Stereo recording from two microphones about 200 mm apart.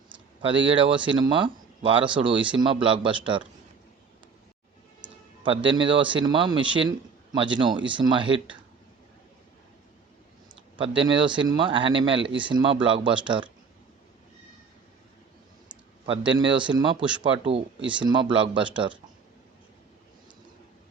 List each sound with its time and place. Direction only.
0.5 s speech: 65° right (ahead or behind)
0.8 s speech: 25° right (ahead or behind)
4.9 s speech: 25° right (ahead or behind)
10.8 s speech: 25° right (ahead or behind)
16.5 s speech: 25° right (ahead or behind)